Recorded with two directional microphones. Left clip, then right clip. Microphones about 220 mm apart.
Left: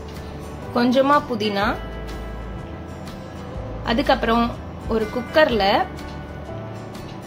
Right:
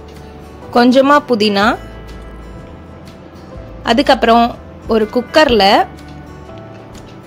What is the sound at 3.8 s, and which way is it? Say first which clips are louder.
Speech: right 9 dB; 40° right (ahead or behind).